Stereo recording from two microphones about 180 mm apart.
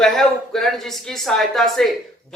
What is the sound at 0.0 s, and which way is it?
Speech, 5° left (ahead or behind).